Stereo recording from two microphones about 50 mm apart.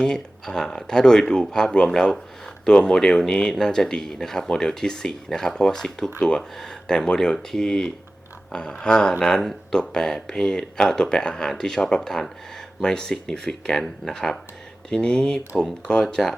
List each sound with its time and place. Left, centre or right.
0.0 s speech: centre
16.2 s speech: centre